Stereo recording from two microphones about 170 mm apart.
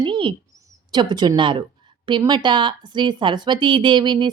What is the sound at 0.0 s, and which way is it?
Bird, 30° right (ahead or behind).